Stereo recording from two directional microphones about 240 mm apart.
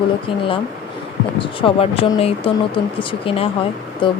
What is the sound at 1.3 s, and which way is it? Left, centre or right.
Speech, left.